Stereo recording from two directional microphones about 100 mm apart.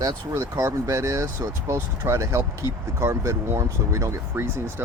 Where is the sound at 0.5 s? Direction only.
25° right (ahead or behind).